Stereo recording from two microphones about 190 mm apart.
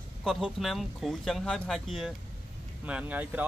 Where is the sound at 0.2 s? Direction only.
Centre (ahead or behind).